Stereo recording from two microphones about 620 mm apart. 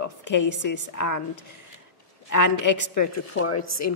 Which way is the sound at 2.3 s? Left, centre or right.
Left.